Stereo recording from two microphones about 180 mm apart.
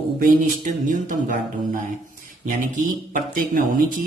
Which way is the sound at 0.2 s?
50° right (ahead or behind).